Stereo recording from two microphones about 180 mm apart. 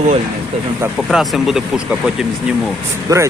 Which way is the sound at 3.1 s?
20° right (ahead or behind).